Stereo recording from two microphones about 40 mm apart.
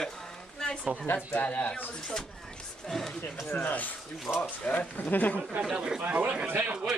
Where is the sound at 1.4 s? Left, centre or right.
Left.